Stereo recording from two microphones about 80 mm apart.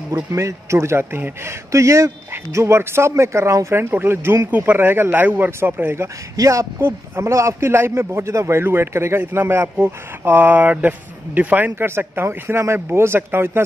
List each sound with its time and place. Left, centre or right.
0.1 s a man's voice: right
5.9 s speech: right
6.8 s a man's voice: right